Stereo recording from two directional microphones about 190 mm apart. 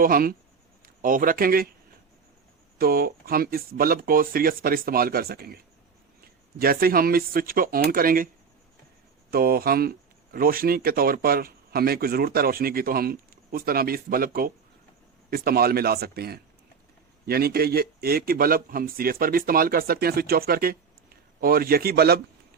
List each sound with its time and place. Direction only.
0.0 s speech: 50° right (ahead or behind)
2.7 s speech: 50° right (ahead or behind)
6.6 s speech: 50° right (ahead or behind)
9.3 s speech: 50° right (ahead or behind)